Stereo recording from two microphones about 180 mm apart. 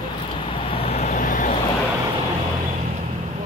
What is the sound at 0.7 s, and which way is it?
Vehicle, 35° left (ahead or behind).